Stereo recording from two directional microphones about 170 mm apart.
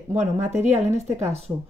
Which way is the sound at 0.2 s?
40° right (ahead or behind).